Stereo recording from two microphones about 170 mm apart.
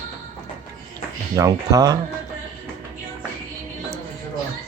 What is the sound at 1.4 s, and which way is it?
Speech, 20° right (ahead or behind).